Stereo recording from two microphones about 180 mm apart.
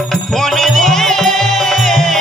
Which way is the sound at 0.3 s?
Centre (ahead or behind).